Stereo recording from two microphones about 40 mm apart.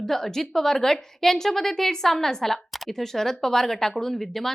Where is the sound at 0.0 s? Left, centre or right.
Centre.